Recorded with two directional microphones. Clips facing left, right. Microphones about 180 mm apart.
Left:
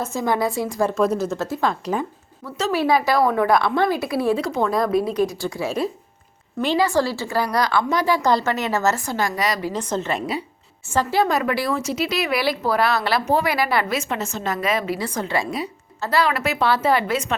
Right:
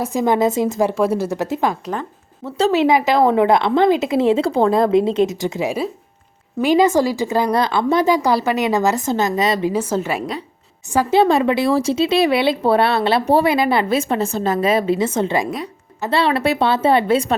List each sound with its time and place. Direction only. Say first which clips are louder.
0.0 s speech: right 5 dB; 15° right (ahead or behind)
0.9 s speech: right 2 dB; 10° right (ahead or behind)
2.4 s speech: right 6 dB; 30° right (ahead or behind)
9.7 s speech: right 4 dB; 10° right (ahead or behind)
11.1 s speech: right 7 dB; 30° right (ahead or behind)
15.4 s a woman's voice: right 1 dB; centre (ahead or behind)
16.0 s speech: right 3 dB; 25° right (ahead or behind)